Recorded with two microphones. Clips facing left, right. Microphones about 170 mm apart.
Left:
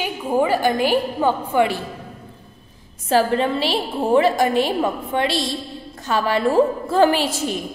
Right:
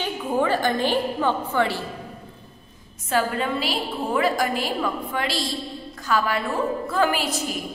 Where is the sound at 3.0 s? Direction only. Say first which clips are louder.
Left 6 dB; 30° left (ahead or behind).